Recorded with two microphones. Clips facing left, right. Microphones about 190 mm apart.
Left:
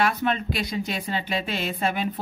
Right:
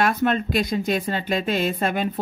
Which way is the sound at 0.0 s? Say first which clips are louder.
Right 3 dB; 45° right (ahead or behind).